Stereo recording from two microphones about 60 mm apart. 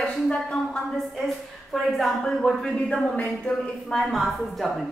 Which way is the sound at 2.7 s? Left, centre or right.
Centre.